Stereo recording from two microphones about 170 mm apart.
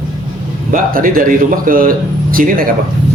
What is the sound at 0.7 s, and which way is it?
A man's voice, 55° right (ahead or behind).